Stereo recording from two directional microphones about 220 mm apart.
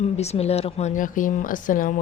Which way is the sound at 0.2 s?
30° left (ahead or behind).